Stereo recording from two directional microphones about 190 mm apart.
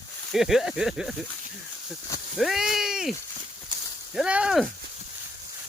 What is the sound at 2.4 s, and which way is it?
Speech, centre (ahead or behind).